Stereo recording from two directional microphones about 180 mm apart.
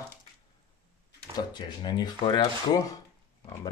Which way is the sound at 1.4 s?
25° left (ahead or behind).